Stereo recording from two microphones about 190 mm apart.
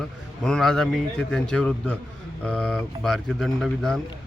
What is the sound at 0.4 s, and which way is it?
Speech, centre (ahead or behind).